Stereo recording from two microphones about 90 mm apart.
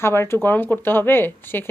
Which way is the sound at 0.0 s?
30° left (ahead or behind).